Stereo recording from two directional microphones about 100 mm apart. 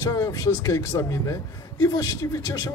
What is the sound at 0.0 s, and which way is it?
A man's voice, 30° left (ahead or behind).